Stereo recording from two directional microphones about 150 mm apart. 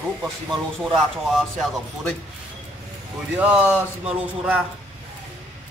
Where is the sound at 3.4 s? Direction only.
10° right (ahead or behind).